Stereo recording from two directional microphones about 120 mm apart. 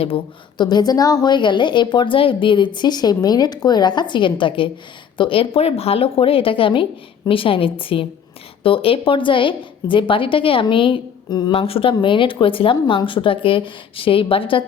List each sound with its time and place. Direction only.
0.0 s a woman's voice: 45° left (ahead or behind)
11.5 s speech: 50° left (ahead or behind)